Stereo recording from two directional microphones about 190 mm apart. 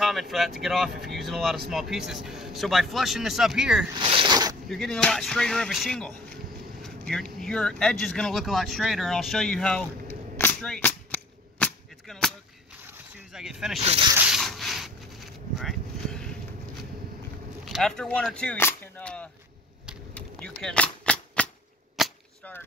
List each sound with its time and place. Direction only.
0.0 s vehicle: centre (ahead or behind)
0.6 s a man's voice: centre (ahead or behind)
3.9 s zipper: 25° right (ahead or behind)
4.6 s a man's voice: centre (ahead or behind)
6.8 s vehicle: 5° left (ahead or behind)
12.9 s a sound: 5° right (ahead or behind)
13.7 s speech: 30° right (ahead or behind)
14.1 s rub: 5° right (ahead or behind)
17.6 s speech: centre (ahead or behind)
20.2 s a sound: 5° left (ahead or behind)
21.9 s cap gun: centre (ahead or behind)